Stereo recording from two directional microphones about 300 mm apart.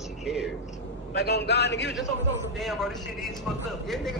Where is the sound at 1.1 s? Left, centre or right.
Left.